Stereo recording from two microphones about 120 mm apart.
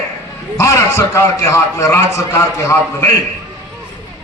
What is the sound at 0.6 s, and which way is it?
A man's voice, 25° left (ahead or behind).